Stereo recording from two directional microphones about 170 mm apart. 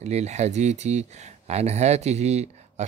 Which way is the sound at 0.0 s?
40° right (ahead or behind).